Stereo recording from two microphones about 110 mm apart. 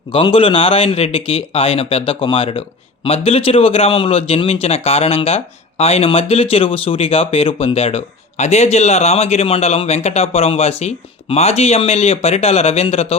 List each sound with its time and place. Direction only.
0.1 s speech: 55° left (ahead or behind)